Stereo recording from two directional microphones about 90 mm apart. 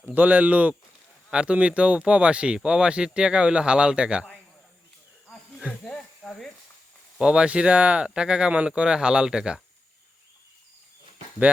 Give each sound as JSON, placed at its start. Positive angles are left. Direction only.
{"t": 0.0, "sound": "speech", "side_deg": -20}
{"t": 5.8, "sound": "snake", "side_deg": 10}
{"t": 7.2, "sound": "speech", "side_deg": -10}